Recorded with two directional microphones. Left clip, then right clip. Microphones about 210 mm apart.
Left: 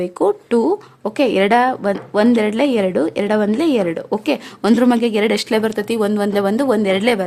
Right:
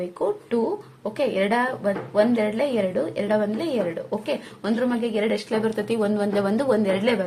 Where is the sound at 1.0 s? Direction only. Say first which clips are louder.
Left 7 dB; 50° left (ahead or behind).